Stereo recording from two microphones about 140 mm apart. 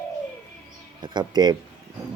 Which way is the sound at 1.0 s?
30° right (ahead or behind).